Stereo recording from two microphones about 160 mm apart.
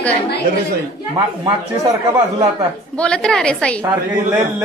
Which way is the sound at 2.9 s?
5° left (ahead or behind).